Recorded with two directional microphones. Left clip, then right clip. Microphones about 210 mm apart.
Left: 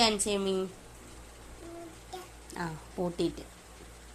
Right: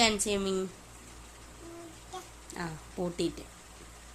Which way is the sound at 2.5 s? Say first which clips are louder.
Left 1 dB; 10° right (ahead or behind).